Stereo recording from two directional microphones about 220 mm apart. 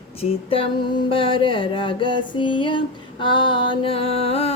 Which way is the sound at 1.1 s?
25° left (ahead or behind).